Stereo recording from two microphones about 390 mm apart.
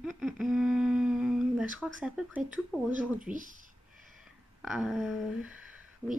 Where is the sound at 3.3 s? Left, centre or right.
Centre.